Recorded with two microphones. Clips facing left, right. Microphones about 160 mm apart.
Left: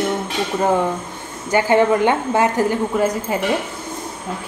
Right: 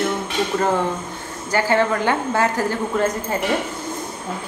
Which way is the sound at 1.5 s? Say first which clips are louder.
Left 4 dB; 20° left (ahead or behind).